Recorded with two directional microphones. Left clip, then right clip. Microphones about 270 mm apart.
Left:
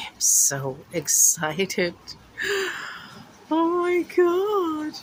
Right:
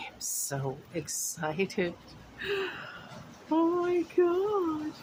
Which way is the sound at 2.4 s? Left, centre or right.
Centre.